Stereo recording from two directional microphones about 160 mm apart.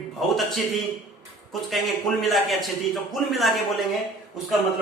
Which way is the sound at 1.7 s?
Centre (ahead or behind).